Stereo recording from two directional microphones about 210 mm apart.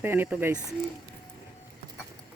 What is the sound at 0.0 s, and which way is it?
Speech, 10° right (ahead or behind).